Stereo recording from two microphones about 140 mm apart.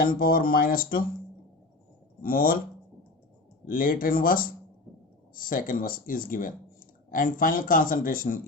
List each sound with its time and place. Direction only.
0.0 s speech: 90° left
2.2 s speech: 90° left
3.7 s speech: 90° left
5.3 s speech: 80° left